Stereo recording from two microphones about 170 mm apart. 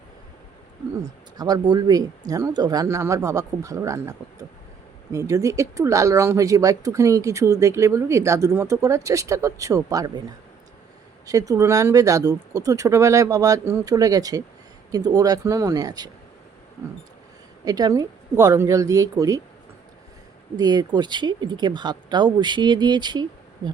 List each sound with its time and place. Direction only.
1.4 s speech: 25° right (ahead or behind)
11.3 s speech: 20° right (ahead or behind)
17.7 s speech: 20° right (ahead or behind)
20.6 s speech: 25° right (ahead or behind)